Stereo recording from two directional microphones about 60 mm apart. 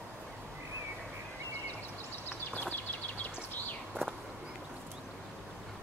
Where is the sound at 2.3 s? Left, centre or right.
Left.